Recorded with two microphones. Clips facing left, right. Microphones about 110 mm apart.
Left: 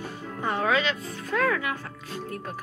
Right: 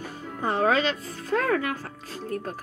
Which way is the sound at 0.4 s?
40° right (ahead or behind).